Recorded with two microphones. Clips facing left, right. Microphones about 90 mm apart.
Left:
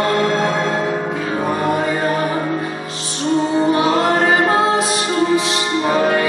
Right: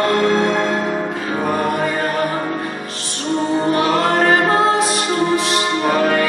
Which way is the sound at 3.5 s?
15° left (ahead or behind).